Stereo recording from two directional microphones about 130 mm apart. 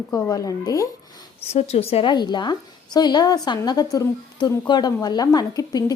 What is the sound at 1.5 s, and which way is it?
Speech, 50° left (ahead or behind).